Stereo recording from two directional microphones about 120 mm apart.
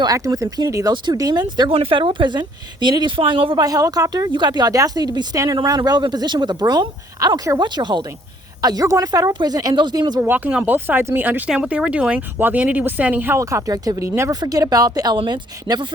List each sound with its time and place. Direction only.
0.0 s speech: 30° right (ahead or behind)
3.6 s speech: 30° right (ahead or behind)
10.2 s speech: 15° right (ahead or behind); by 15.9 s 35° right (ahead or behind)